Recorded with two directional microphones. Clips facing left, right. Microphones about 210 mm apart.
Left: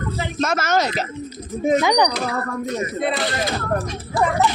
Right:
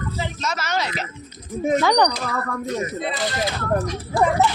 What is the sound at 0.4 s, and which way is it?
Speech, 50° left (ahead or behind).